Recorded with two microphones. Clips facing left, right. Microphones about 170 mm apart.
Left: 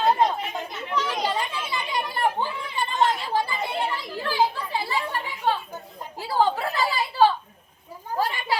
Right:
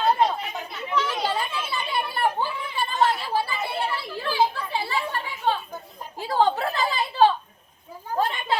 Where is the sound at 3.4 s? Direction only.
15° left (ahead or behind).